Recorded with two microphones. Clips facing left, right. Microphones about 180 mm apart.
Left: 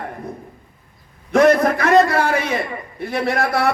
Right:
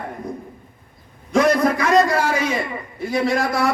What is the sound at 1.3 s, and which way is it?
A man's voice, 60° left (ahead or behind).